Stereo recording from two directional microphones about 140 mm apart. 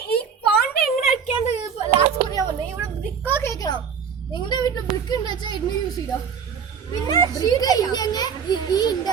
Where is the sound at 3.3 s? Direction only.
20° left (ahead or behind).